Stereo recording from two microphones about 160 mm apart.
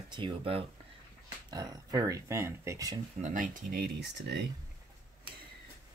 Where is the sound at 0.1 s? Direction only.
30° right (ahead or behind).